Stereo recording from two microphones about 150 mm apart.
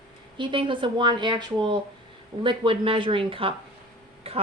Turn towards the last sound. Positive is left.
turn(degrees=-40)  # may be behind; listen again after turning